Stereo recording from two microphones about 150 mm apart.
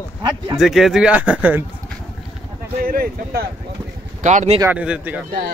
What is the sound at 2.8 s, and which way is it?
Speech, 80° right.